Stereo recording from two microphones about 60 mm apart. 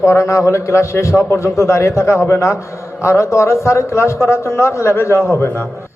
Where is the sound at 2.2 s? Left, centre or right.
Left.